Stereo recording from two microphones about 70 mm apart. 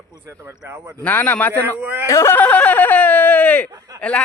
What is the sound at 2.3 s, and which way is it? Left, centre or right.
Speech, left.